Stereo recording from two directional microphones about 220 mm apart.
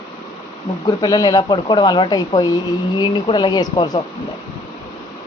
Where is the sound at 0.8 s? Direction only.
15° left (ahead or behind).